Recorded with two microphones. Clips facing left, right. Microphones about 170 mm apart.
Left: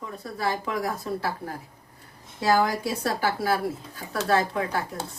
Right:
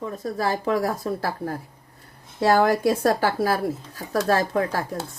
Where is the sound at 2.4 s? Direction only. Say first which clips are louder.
Right 4 dB; 60° right (ahead or behind).